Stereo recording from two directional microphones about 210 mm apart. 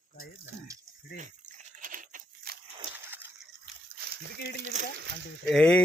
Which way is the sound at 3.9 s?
50° right (ahead or behind).